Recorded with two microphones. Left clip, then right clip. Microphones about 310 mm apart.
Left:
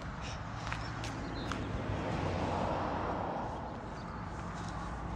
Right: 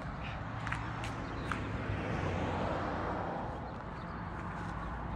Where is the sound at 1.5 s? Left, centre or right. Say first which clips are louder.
Even; left.